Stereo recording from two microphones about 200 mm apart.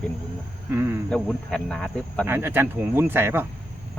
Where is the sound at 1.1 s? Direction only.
5° left (ahead or behind).